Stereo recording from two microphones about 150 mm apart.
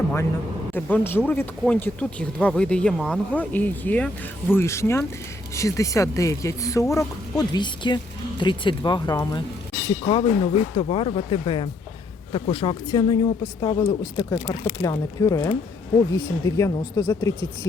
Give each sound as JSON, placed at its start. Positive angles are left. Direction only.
{"t": 0.7, "sound": "speech", "side_deg": 10}